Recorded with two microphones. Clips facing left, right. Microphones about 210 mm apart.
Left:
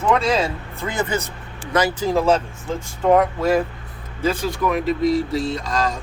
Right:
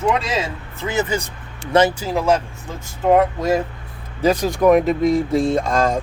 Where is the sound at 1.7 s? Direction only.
25° right (ahead or behind).